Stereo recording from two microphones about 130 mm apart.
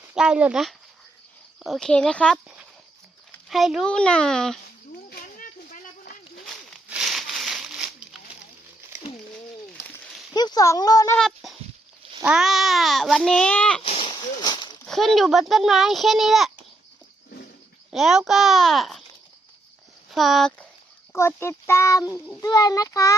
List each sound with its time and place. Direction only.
0.2 s a child's voice: 5° right (ahead or behind)
3.5 s a child's voice: centre (ahead or behind)
5.4 s a sound: 90° left
6.4 s crumpling: centre (ahead or behind)
10.3 s speech: 30° left (ahead or behind)
11.2 s a sound: centre (ahead or behind)
12.2 s a child's voice: 5° right (ahead or behind)
13.8 s a sound: 50° left (ahead or behind)
14.1 s a sound: 35° left (ahead or behind)
14.8 s a child's voice: centre (ahead or behind)
17.9 s a child's voice: centre (ahead or behind)
20.1 s speech: centre (ahead or behind)
21.1 s a child's voice: 20° left (ahead or behind)